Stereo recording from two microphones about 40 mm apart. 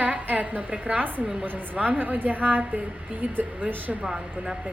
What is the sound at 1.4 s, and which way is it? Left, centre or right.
Speech, right.